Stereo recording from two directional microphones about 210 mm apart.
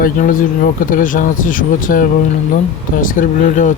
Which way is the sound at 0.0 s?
40° left (ahead or behind).